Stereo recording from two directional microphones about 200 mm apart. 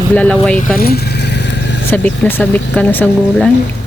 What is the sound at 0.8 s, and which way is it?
Vehicle, 50° left (ahead or behind).